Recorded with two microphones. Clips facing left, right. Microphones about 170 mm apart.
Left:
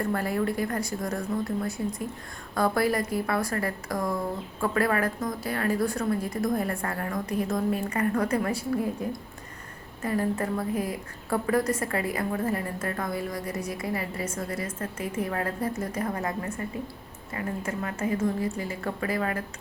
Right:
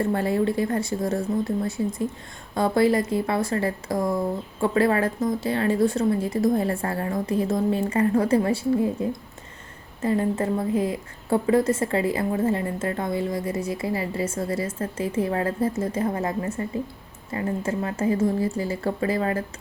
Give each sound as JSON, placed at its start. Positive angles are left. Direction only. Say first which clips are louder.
{"t": 0.0, "sound": "a woman's voice", "louder": "right 5 dB", "side_deg": -25}